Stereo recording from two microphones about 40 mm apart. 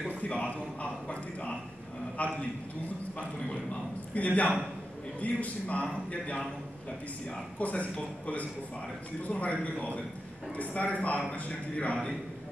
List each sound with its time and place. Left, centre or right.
0.1 s a man's voice: left
4.1 s a man's voice: left
7.2 s a man's voice: left
9.2 s a man's voice: left